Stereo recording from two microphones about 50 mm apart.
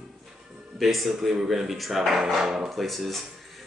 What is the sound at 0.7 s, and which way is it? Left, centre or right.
Speech, centre.